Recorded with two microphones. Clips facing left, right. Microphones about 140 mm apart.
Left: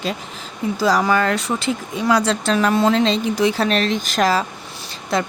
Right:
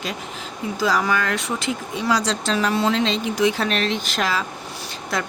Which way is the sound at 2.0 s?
55° left (ahead or behind).